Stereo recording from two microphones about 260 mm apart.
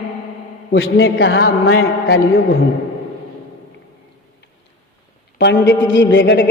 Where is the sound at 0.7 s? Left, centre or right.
Left.